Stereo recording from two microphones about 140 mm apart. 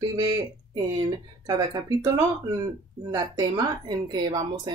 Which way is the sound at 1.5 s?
25° right (ahead or behind).